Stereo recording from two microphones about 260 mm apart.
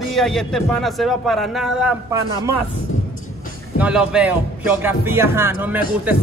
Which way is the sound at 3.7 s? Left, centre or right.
Centre.